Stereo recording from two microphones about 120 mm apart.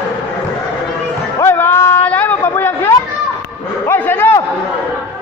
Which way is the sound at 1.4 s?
20° left (ahead or behind).